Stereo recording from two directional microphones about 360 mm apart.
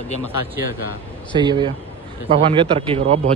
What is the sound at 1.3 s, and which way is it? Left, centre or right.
A man's voice, centre.